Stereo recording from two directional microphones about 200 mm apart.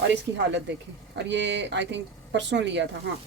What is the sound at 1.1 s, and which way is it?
Speech, 65° right (ahead or behind).